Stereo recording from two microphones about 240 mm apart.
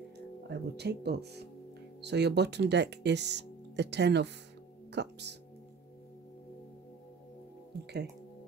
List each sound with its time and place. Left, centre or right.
0.5 s speech: right
7.7 s music: right